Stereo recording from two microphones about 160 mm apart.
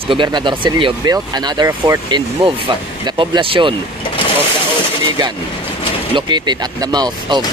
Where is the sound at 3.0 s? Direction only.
30° right (ahead or behind).